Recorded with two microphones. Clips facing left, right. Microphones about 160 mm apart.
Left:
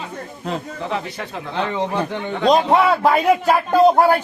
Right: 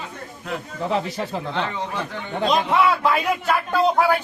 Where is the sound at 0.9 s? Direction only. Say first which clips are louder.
Right 4 dB; 30° right (ahead or behind).